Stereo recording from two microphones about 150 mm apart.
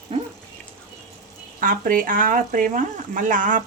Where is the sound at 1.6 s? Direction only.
65° right (ahead or behind).